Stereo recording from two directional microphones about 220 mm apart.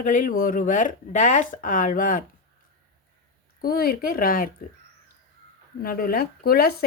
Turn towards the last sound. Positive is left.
turn(degrees=45)  # may be behind; listen again after turning